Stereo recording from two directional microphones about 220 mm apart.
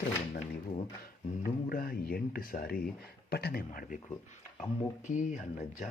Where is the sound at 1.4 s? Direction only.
40° left (ahead or behind).